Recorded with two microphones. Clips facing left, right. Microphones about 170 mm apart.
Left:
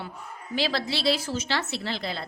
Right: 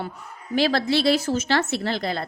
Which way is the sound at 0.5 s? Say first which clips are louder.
Right 7 dB; 50° right (ahead or behind).